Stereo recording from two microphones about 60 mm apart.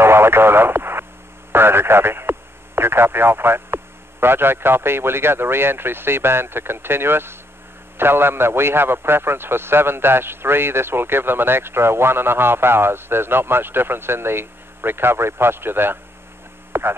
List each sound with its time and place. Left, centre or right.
0.0 s radio: right
1.5 s a man's voice: right
16.7 s hum: right